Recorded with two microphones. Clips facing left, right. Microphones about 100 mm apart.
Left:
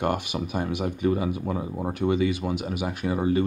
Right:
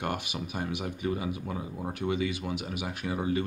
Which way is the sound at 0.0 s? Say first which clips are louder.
Left 7 dB; 40° left (ahead or behind).